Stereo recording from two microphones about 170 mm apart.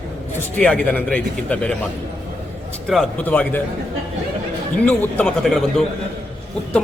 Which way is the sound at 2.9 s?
5° left (ahead or behind).